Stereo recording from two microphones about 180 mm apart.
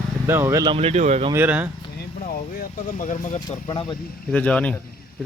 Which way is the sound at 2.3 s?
55° left (ahead or behind).